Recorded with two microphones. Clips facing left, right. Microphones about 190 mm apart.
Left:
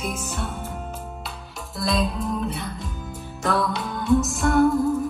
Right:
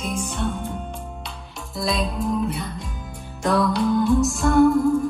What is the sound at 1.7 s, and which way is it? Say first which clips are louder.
Music: even; centre (ahead or behind).